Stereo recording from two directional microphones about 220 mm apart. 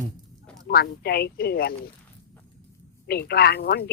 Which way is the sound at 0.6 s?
45° left (ahead or behind).